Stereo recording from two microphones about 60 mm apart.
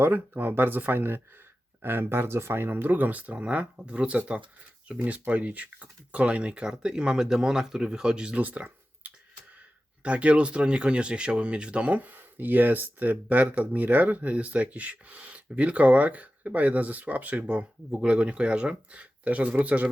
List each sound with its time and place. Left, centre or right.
0.0 s speech: right; by 8.4 s centre
8.4 s a sound: right
10.0 s speech: right